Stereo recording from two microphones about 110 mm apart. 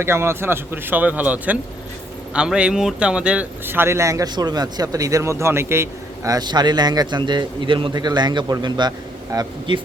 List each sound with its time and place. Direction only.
0.0 s speech: 25° right (ahead or behind); by 9.8 s 40° right (ahead or behind)